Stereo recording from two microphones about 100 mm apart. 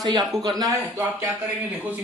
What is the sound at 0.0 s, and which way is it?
A man's voice, 45° right (ahead or behind).